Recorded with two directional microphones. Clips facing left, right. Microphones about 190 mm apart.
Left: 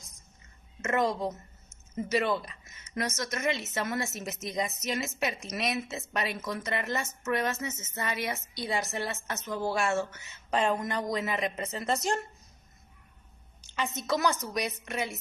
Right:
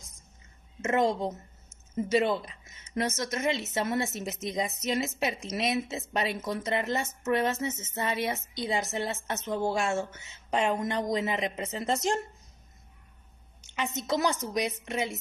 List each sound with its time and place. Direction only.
2.0 s a woman's voice: 25° right (ahead or behind)
13.6 s a woman's voice: 20° right (ahead or behind)